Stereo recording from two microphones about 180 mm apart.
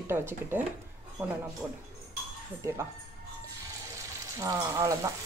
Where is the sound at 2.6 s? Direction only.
15° right (ahead or behind).